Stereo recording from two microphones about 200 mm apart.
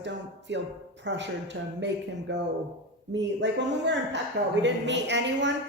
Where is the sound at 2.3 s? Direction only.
60° right (ahead or behind).